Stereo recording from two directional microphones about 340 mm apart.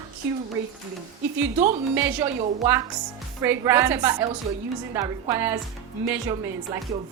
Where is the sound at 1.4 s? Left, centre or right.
Centre.